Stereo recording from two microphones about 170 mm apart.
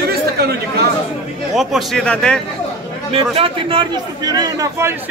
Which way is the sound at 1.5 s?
Centre (ahead or behind).